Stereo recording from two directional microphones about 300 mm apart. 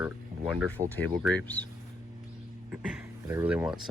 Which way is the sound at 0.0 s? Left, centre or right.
Centre.